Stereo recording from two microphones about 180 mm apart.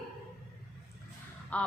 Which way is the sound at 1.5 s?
5° left (ahead or behind).